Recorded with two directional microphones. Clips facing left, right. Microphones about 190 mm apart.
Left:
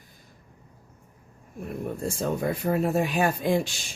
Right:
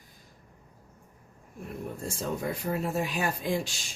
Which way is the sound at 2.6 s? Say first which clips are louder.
Left 7 dB; 60° left (ahead or behind).